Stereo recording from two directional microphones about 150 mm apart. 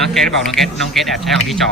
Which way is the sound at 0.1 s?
Centre (ahead or behind).